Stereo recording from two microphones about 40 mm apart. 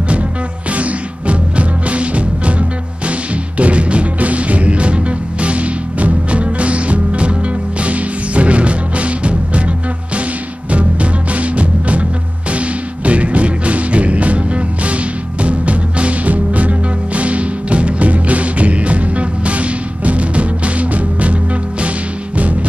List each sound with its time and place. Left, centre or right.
0.7 s music: right
10.7 s music: right
22.4 s music: right